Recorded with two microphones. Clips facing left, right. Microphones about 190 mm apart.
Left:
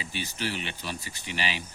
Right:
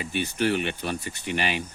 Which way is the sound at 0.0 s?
55° right (ahead or behind).